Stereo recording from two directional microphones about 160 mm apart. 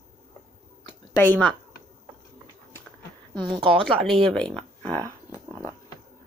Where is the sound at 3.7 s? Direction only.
Centre (ahead or behind).